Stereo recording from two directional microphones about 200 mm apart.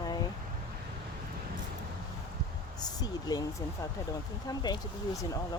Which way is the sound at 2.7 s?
20° left (ahead or behind).